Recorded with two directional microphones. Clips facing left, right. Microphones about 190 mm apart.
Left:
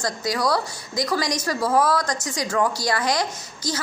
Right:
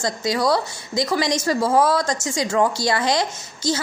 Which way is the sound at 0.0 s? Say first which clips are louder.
Right 3 dB; 25° right (ahead or behind).